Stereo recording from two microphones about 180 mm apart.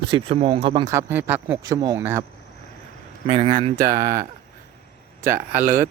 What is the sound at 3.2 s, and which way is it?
Speech, 30° right (ahead or behind).